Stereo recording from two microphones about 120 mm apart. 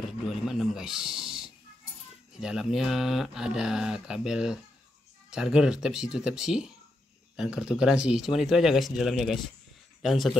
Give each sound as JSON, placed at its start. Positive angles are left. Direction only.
{"t": 0.5, "sound": "speech", "side_deg": -5}